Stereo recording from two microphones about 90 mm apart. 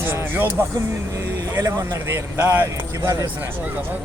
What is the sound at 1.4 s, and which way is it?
Speech, 40° right (ahead or behind).